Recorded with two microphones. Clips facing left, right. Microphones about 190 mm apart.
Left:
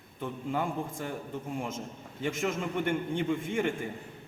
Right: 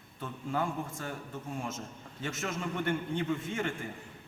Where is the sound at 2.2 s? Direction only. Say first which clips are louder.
Left 5 dB; 15° left (ahead or behind).